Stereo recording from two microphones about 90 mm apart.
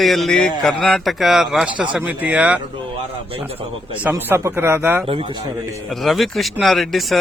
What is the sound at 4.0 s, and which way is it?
Speech, 20° right (ahead or behind).